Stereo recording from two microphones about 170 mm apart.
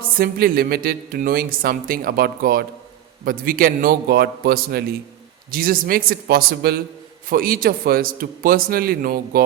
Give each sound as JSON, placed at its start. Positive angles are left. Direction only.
{"t": 0.2, "sound": "speech", "side_deg": -60}